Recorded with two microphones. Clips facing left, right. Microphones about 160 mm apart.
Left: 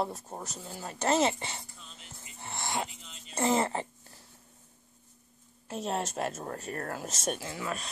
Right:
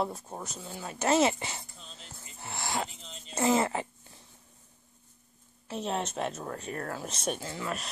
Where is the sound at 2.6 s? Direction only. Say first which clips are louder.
Right 1 dB; 20° left (ahead or behind).